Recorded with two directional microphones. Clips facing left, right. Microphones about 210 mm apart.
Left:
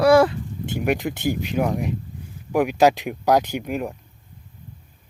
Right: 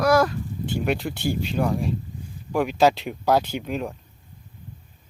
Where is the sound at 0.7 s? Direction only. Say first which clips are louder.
Left 3 dB; 15° left (ahead or behind).